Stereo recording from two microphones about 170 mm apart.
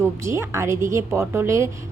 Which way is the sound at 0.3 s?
15° right (ahead or behind).